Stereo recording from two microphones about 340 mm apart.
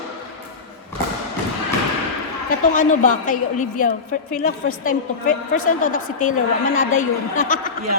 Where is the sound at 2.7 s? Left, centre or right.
Left.